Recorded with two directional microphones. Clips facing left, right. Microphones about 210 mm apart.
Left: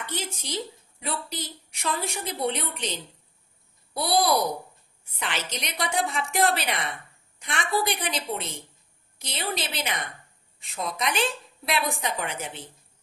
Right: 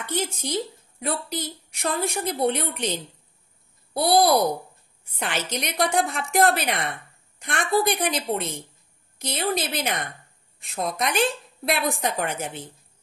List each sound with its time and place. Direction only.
0.1 s a woman's voice: 50° right (ahead or behind)